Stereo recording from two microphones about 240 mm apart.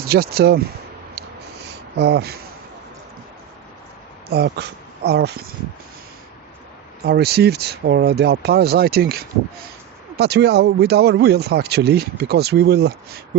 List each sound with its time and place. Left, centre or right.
0.0 s speech: right
2.0 s speech: right
4.3 s speech: right
7.0 s speech: right